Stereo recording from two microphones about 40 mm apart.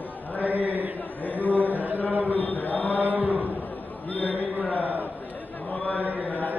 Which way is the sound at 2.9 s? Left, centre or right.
Right.